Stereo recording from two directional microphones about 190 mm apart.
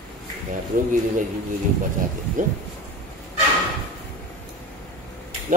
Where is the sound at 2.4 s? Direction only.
40° right (ahead or behind).